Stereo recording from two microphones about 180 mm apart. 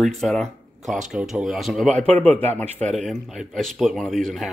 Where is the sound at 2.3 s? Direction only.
35° right (ahead or behind).